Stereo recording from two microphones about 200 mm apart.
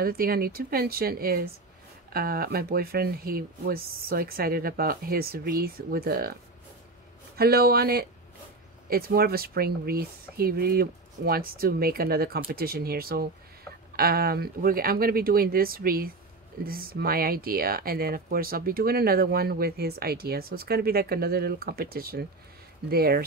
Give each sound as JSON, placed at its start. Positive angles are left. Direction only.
{"t": 0.0, "sound": "speech", "side_deg": -50}
{"t": 7.3, "sound": "speech", "side_deg": -50}